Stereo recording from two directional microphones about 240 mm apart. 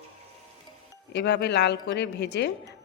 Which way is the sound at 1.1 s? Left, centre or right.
Left.